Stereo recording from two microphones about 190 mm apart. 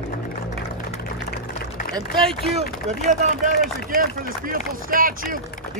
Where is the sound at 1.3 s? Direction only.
50° left (ahead or behind).